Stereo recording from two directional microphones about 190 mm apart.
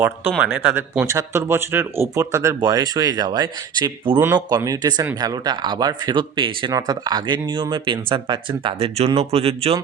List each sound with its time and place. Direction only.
0.0 s speech: 10° right (ahead or behind); by 9.8 s 30° right (ahead or behind)